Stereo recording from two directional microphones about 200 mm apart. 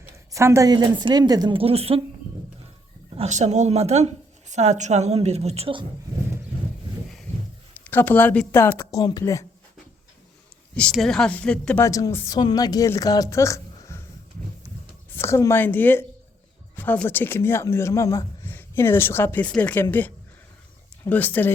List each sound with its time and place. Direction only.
0.3 s a woman's voice: 15° right (ahead or behind); by 2.0 s 30° right (ahead or behind)
3.2 s a woman's voice: 35° right (ahead or behind)
7.9 s speech: 10° left (ahead or behind)
10.8 s speech: 5° left (ahead or behind)
15.1 s speech: 10° left (ahead or behind)